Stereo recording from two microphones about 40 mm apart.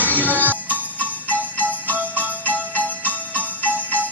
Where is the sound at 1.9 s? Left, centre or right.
Right.